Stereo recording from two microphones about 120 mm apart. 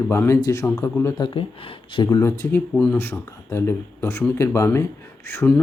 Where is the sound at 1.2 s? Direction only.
50° left (ahead or behind).